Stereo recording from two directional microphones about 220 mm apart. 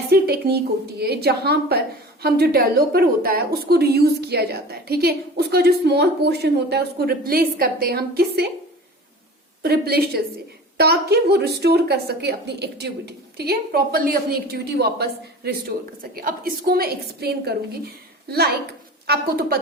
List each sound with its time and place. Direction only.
0.1 s a woman's voice: 45° right (ahead or behind)
9.6 s a woman's voice: 45° right (ahead or behind)